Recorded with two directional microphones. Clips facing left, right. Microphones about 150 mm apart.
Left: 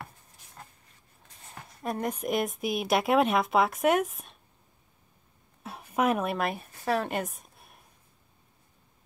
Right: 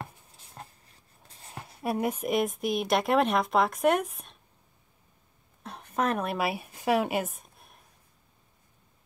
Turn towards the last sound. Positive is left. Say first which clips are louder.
# right 1 dB
turn(degrees=0)  # may be behind; listen again after turning